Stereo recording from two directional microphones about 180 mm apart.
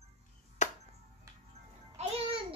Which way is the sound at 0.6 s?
40° left (ahead or behind).